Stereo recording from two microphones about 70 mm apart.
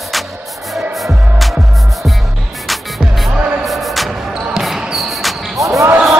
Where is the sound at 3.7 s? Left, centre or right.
Centre.